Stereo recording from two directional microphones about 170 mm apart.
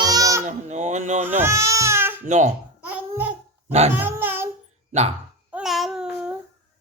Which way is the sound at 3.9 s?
10° right (ahead or behind).